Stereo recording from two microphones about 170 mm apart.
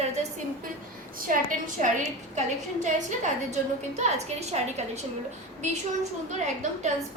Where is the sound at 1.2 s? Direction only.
50° right (ahead or behind).